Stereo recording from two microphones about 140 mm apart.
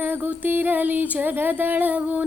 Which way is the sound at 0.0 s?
15° right (ahead or behind).